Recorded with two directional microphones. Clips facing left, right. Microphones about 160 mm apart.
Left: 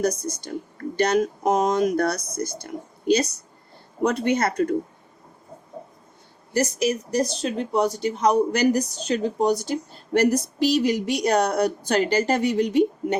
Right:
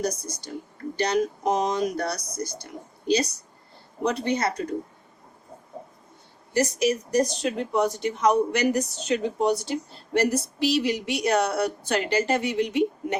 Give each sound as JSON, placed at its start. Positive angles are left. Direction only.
{"t": 0.0, "sound": "speech", "side_deg": 55}
{"t": 4.0, "sound": "speech", "side_deg": 50}
{"t": 6.5, "sound": "speech", "side_deg": 35}